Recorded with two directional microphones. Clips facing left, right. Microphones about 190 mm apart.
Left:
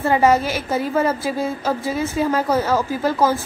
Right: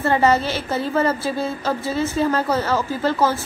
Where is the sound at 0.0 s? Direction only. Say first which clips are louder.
Left 1 dB; 10° left (ahead or behind).